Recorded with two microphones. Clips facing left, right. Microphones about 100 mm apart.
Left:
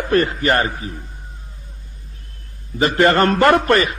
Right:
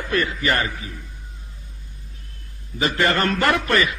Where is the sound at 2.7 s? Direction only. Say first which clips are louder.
Left 6 dB; 40° left (ahead or behind).